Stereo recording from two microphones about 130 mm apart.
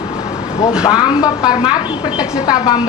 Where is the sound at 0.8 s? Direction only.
35° left (ahead or behind).